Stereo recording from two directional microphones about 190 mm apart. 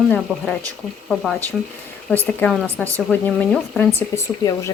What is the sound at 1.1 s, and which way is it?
Speech, centre (ahead or behind).